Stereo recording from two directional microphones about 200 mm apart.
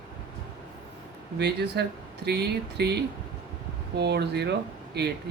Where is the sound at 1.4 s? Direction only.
55° right (ahead or behind).